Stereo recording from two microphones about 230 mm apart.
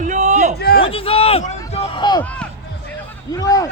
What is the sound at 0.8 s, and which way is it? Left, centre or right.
A man's voice, left.